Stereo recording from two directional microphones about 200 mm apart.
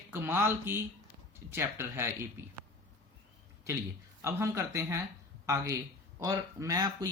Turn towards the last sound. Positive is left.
turn(degrees=-20)  # may be behind; listen again after turning